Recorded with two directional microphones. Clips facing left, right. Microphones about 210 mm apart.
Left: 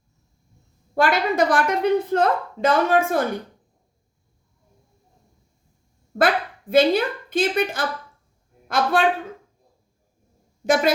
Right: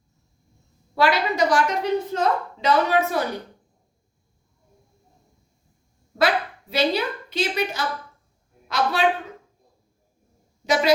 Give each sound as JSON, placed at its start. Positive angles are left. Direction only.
{"t": 0.9, "sound": "a woman's voice", "side_deg": 50}
{"t": 6.1, "sound": "a woman's voice", "side_deg": 50}
{"t": 10.7, "sound": "a woman's voice", "side_deg": 50}